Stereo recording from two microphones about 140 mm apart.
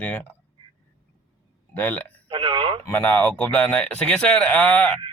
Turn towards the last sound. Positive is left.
turn(degrees=10)  # may be behind; listen again after turning